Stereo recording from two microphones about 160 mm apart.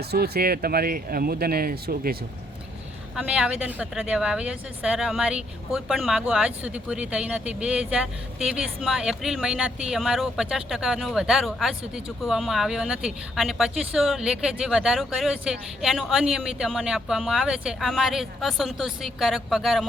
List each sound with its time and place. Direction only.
0.0 s speech: 80° right
3.2 s a woman's voice: 5° right (ahead or behind)